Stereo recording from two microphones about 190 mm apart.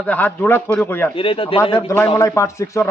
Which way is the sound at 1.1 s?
30° left (ahead or behind).